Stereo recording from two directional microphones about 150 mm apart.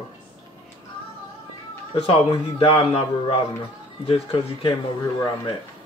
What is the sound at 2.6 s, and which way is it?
A man's voice, 40° left (ahead or behind).